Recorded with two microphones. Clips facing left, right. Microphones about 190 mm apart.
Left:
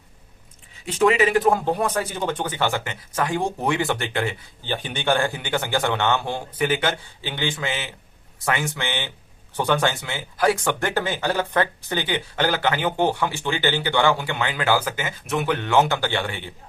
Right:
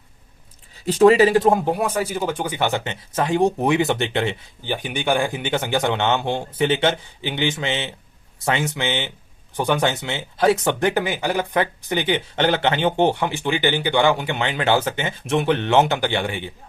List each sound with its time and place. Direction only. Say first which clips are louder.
0.9 s a man's voice: right 6 dB; 35° right (ahead or behind); by 16.5 s 15° right (ahead or behind)